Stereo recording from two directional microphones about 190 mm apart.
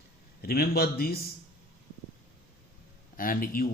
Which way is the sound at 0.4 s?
55° left (ahead or behind).